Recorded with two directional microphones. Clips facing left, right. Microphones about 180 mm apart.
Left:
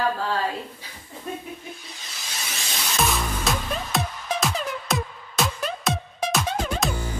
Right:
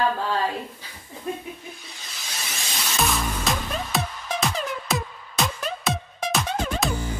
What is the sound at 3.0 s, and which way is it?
Music, centre (ahead or behind).